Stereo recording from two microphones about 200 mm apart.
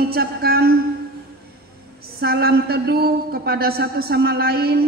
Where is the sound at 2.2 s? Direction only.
50° right (ahead or behind).